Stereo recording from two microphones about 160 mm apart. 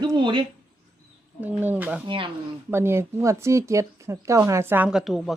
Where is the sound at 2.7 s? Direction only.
15° right (ahead or behind).